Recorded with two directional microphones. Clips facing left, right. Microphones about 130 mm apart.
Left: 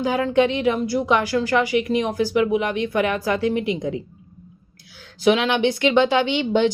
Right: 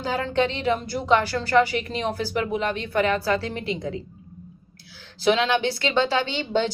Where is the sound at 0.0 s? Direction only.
15° left (ahead or behind).